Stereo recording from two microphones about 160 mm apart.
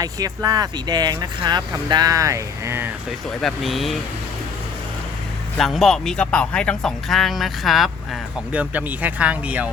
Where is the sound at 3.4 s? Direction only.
Centre (ahead or behind).